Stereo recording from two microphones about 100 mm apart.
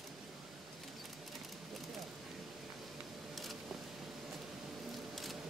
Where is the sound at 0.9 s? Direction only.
Centre (ahead or behind).